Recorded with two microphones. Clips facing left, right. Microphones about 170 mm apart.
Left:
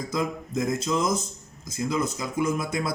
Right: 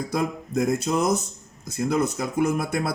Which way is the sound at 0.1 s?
65° right (ahead or behind).